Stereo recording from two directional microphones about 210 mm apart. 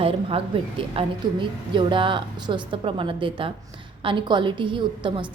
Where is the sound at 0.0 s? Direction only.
25° right (ahead or behind).